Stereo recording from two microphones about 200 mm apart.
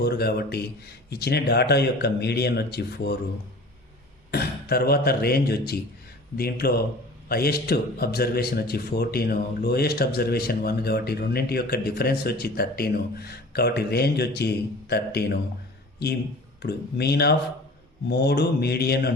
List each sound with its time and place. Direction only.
0.0 s a man's voice: 50° left (ahead or behind)
4.3 s a man's voice: 50° left (ahead or behind)
16.6 s a man's voice: 55° left (ahead or behind)